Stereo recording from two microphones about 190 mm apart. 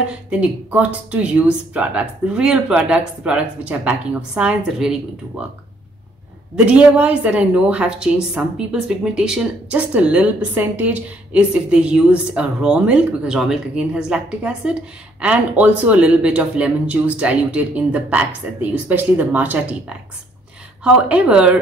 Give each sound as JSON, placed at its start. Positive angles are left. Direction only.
{"t": 0.3, "sound": "a woman's voice", "side_deg": -5}
{"t": 6.5, "sound": "a woman's voice", "side_deg": -5}
{"t": 20.8, "sound": "a woman's voice", "side_deg": -5}